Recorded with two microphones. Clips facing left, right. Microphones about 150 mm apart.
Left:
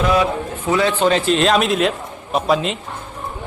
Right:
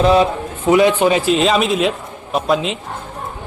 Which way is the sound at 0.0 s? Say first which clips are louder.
Right 4 dB; 30° right (ahead or behind).